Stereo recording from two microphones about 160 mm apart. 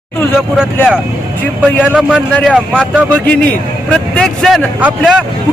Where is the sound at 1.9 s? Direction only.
5° right (ahead or behind).